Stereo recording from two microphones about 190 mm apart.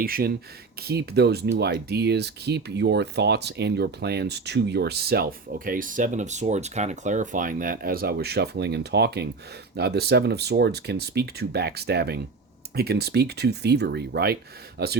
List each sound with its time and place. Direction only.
0.0 s speech: 50° right (ahead or behind)